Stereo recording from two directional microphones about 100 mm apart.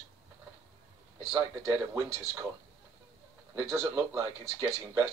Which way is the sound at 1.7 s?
20° right (ahead or behind).